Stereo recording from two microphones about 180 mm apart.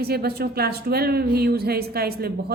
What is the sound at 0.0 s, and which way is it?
A woman's voice, 60° right (ahead or behind).